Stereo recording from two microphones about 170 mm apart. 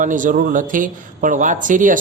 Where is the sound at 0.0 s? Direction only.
50° right (ahead or behind).